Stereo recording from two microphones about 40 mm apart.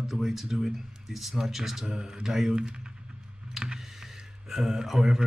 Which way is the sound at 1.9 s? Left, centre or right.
Centre.